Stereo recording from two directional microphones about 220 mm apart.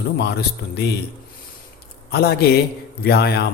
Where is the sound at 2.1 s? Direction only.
45° left (ahead or behind).